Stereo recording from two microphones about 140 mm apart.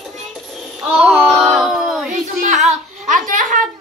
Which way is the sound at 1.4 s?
Centre (ahead or behind).